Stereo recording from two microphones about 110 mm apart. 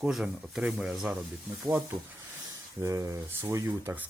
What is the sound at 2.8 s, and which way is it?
Speech, 30° right (ahead or behind).